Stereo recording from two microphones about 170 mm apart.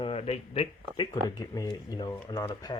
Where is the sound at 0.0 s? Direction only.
35° left (ahead or behind).